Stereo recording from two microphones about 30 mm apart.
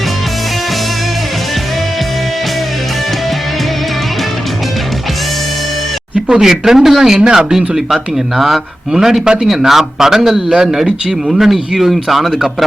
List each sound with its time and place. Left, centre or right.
6.4 s speech: centre
8.4 s speech: centre